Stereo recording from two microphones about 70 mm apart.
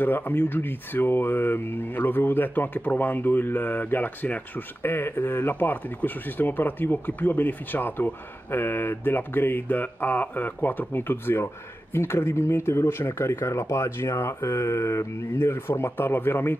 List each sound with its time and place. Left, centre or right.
0.0 s speech: left